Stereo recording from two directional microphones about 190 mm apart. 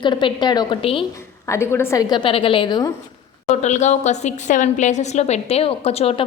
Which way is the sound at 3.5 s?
35° left (ahead or behind).